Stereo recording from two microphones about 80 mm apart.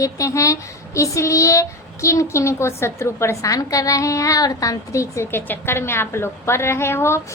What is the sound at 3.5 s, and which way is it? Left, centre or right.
A child's voice, left.